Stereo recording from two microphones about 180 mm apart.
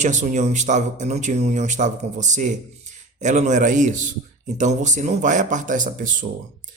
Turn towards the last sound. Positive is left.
turn(degrees=-45)  # may be behind; listen again after turning